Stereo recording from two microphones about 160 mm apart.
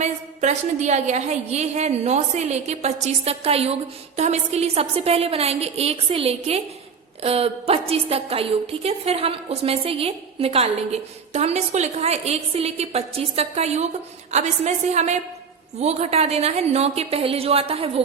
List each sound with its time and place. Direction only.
0.0 s a woman's voice: 45° right (ahead or behind)